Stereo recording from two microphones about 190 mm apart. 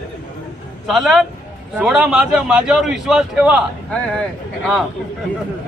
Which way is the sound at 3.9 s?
5° left (ahead or behind).